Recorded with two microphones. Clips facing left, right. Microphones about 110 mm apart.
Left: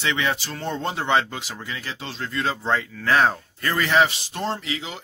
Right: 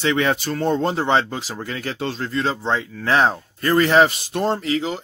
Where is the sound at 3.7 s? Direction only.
40° right (ahead or behind).